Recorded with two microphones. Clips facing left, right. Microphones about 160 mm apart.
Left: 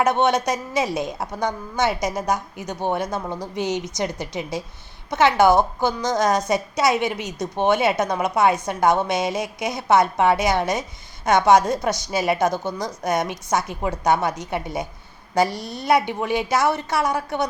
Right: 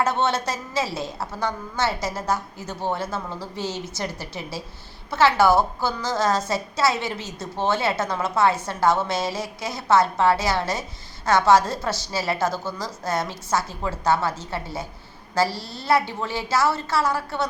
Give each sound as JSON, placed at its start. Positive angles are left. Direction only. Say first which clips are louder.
{"t": 0.0, "sound": "a woman's voice", "louder": "left 4 dB", "side_deg": 15}